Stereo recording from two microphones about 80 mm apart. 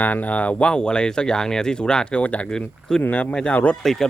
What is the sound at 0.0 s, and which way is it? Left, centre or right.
Speech, left.